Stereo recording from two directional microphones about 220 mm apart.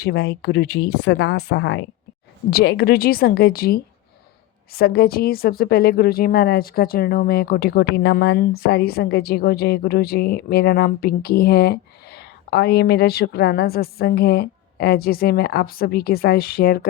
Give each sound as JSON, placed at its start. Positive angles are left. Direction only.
{"t": 0.0, "sound": "a woman's voice", "side_deg": 45}
{"t": 0.9, "sound": "a woman's voice", "side_deg": 80}
{"t": 1.2, "sound": "a woman's voice", "side_deg": 50}
{"t": 2.5, "sound": "a woman's voice", "side_deg": 45}